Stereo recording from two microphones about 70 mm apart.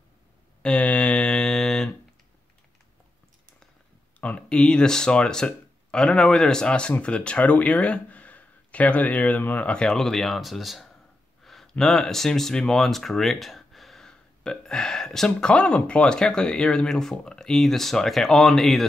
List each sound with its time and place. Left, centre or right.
0.6 s mantra: centre
4.2 s speech: centre
11.4 s a sound: centre
11.8 s speech: centre